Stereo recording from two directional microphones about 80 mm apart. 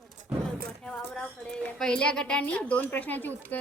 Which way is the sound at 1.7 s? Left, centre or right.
Centre.